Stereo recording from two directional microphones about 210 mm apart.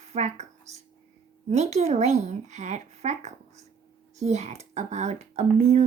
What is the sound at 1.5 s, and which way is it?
Speech, 30° right (ahead or behind).